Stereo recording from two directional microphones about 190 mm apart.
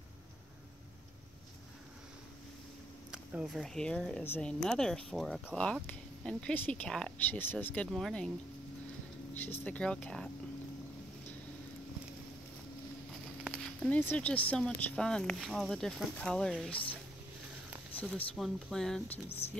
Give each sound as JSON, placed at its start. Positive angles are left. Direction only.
{"t": 3.1, "sound": "speech", "side_deg": 0}
{"t": 9.3, "sound": "speech", "side_deg": 10}
{"t": 13.5, "sound": "speech", "side_deg": 5}
{"t": 17.9, "sound": "speech", "side_deg": 5}
{"t": 19.2, "sound": "a woman's voice", "side_deg": 30}